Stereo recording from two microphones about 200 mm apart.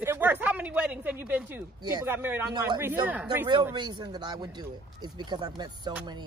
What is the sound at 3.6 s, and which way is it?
A man's voice, 20° right (ahead or behind).